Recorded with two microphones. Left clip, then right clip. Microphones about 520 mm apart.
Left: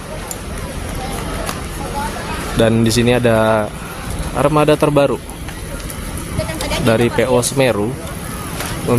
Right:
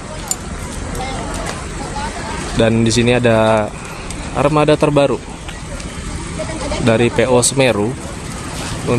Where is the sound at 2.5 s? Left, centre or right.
Left.